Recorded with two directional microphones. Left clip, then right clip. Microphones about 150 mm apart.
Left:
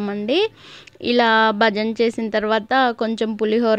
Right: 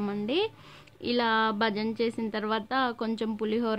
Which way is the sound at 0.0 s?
35° left (ahead or behind).